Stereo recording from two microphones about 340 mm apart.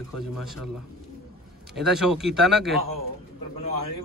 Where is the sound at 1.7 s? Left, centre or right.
Centre.